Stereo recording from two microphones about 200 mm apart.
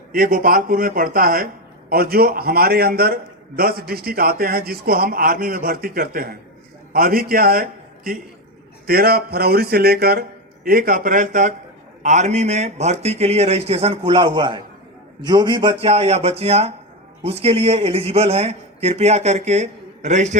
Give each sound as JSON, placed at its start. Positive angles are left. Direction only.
{"t": 0.1, "sound": "a man's voice", "side_deg": -45}